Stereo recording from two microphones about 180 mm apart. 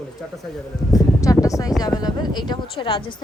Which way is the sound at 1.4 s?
20° left (ahead or behind).